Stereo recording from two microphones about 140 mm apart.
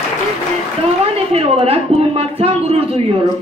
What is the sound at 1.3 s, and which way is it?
A woman's voice, 45° right (ahead or behind).